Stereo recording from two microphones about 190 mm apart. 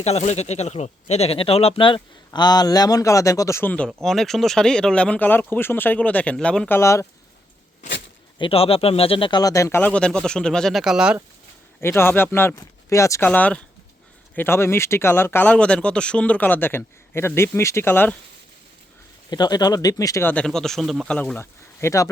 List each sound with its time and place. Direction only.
0.0 s speech: 35° left (ahead or behind); by 7.1 s 15° left (ahead or behind)
8.4 s speech: 30° left (ahead or behind); by 11.2 s 5° right (ahead or behind)
11.8 s speech: 10° left (ahead or behind)
19.3 s speech: 20° left (ahead or behind)